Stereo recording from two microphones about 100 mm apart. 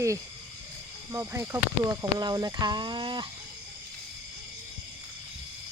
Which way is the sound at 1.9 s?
40° right (ahead or behind).